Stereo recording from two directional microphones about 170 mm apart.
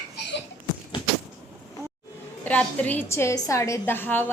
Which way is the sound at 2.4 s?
10° left (ahead or behind).